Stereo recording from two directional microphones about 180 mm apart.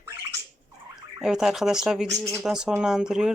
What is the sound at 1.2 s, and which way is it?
Speech, 5° right (ahead or behind).